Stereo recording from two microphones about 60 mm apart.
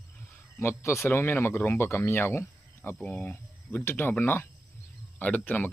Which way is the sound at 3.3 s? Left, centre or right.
Left.